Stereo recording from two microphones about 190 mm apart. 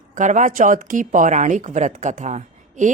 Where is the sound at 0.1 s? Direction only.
40° right (ahead or behind).